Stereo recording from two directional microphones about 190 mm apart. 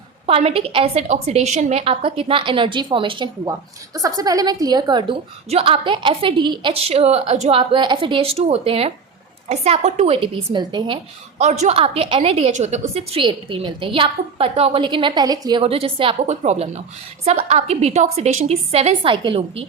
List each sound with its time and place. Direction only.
0.3 s a woman's voice: 30° right (ahead or behind)